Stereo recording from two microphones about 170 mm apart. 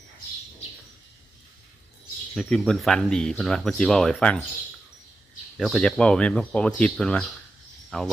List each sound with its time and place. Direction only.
2.3 s speech: centre (ahead or behind)
5.5 s speech: centre (ahead or behind)